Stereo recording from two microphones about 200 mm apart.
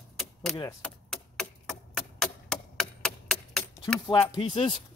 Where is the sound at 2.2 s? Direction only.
5° left (ahead or behind).